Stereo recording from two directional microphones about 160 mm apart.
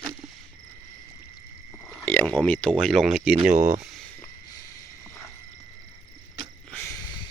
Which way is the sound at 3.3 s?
40° right (ahead or behind).